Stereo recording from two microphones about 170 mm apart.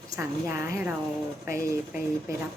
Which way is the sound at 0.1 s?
15° right (ahead or behind).